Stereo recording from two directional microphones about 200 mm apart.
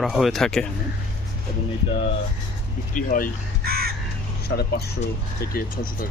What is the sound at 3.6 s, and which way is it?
Crow, 50° right (ahead or behind).